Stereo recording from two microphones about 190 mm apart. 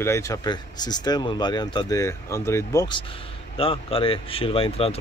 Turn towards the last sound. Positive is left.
turn(degrees=30)  # may be behind; listen again after turning